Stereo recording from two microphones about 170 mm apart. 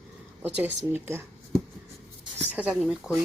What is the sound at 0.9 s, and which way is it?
Speech, 15° right (ahead or behind).